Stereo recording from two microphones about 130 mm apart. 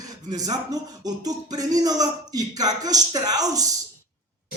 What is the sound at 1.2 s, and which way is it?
Speech, 30° right (ahead or behind).